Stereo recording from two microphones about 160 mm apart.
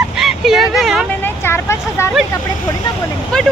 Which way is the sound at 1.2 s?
15° left (ahead or behind).